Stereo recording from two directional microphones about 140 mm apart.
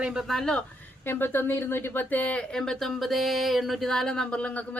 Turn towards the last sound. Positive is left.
turn(degrees=10)  # may be behind; listen again after turning